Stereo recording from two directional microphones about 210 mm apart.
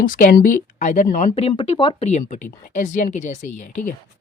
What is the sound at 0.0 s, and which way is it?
Speech, 40° left (ahead or behind).